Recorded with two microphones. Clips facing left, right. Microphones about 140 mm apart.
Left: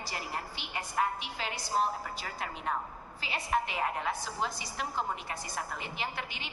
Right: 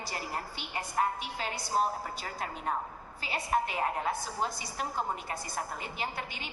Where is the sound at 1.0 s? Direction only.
35° right (ahead or behind).